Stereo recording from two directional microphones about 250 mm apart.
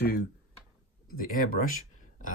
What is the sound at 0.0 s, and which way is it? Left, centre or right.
Speech, left.